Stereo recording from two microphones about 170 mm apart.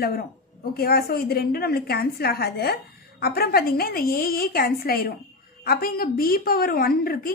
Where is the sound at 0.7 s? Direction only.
65° left (ahead or behind).